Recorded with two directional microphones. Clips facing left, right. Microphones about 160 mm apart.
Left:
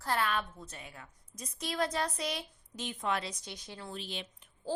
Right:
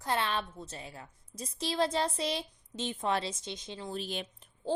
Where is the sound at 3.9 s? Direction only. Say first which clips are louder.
Right 6 dB; 45° right (ahead or behind).